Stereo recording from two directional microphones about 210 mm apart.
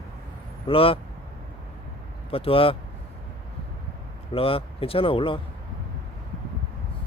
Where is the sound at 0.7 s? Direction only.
25° left (ahead or behind).